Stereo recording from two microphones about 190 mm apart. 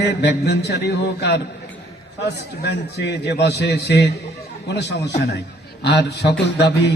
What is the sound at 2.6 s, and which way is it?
A man's voice, 65° left (ahead or behind).